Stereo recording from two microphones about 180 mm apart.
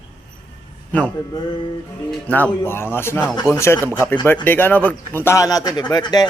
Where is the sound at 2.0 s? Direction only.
10° left (ahead or behind).